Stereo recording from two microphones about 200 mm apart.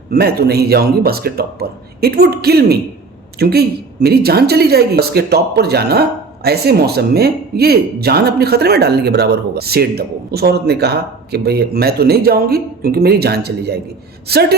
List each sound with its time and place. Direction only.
0.1 s speech: 50° right (ahead or behind)